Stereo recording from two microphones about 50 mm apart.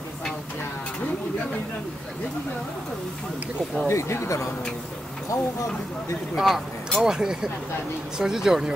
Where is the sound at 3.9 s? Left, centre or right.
Left.